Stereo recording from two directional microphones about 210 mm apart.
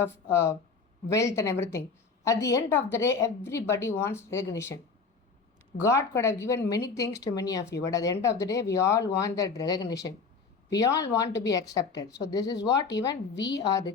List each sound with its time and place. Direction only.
0.0 s a woman's voice: 10° left (ahead or behind)
5.8 s a woman's voice: 15° left (ahead or behind)
13.3 s a woman's voice: 55° left (ahead or behind)
13.6 s a woman's voice: 15° left (ahead or behind)